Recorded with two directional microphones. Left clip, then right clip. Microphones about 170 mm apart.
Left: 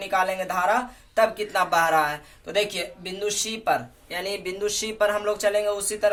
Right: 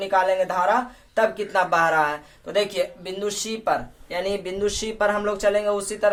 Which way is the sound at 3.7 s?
30° right (ahead or behind).